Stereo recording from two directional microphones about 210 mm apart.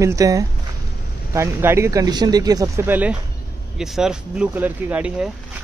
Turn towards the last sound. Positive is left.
turn(degrees=-5)  # may be behind; listen again after turning